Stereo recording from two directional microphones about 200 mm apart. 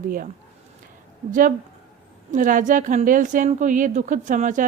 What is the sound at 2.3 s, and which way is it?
A woman's voice, 40° right (ahead or behind).